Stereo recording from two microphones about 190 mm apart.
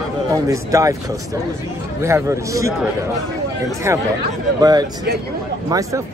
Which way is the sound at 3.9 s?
15° right (ahead or behind).